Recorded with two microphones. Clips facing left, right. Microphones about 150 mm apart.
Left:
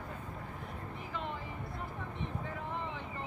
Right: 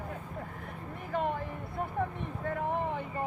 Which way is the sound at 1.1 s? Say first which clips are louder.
Right 10 dB; 50° right (ahead or behind).